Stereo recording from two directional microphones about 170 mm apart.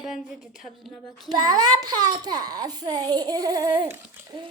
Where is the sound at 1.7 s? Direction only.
20° right (ahead or behind).